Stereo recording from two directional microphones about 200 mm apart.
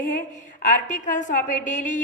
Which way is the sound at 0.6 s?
40° left (ahead or behind).